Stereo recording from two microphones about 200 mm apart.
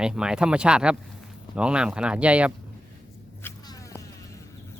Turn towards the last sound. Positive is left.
turn(degrees=15)  # may be behind; listen again after turning